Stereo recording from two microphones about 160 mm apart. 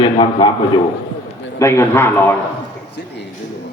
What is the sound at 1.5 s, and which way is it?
Speech, 15° left (ahead or behind).